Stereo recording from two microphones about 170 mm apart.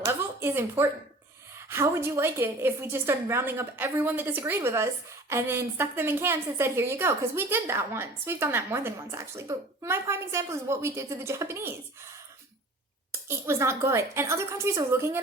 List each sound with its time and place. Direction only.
0.0 s a sound: 15° right (ahead or behind)
1.5 s a woman's voice: 15° right (ahead or behind)
13.1 s a woman's voice: 15° right (ahead or behind)